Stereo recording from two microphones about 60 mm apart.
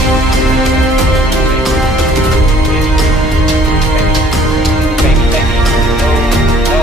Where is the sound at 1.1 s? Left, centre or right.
Centre.